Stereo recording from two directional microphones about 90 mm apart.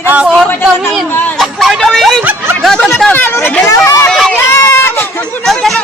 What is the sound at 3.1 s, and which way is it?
Speech, 25° left (ahead or behind).